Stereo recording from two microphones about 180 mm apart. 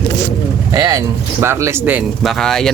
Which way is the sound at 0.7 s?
20° right (ahead or behind).